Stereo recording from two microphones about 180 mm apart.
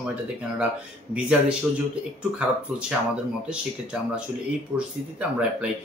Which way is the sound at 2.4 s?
5° right (ahead or behind).